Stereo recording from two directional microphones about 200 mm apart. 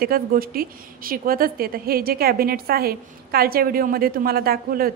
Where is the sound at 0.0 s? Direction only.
45° right (ahead or behind).